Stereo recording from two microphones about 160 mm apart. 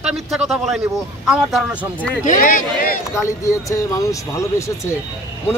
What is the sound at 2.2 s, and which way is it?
Speech, 55° left (ahead or behind).